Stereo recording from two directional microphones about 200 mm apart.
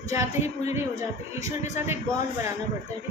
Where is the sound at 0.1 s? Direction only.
15° right (ahead or behind).